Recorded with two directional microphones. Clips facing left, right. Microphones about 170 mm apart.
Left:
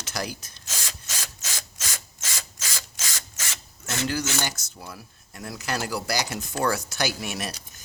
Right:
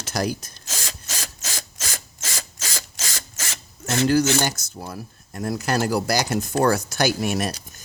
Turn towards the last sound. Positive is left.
turn(degrees=-45)  # may be behind; listen again after turning